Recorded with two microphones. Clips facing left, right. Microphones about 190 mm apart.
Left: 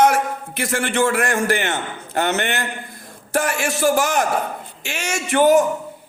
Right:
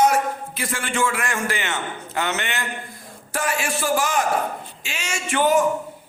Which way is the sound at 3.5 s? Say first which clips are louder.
Left 2 dB; 70° left (ahead or behind).